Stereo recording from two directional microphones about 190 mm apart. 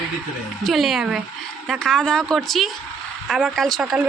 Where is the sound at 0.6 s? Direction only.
Centre (ahead or behind).